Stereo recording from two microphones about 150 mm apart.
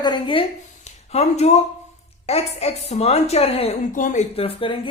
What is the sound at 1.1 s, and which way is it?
A woman's voice, 45° left (ahead or behind).